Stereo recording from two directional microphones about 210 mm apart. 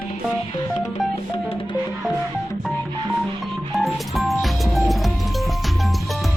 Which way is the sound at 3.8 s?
Centre (ahead or behind).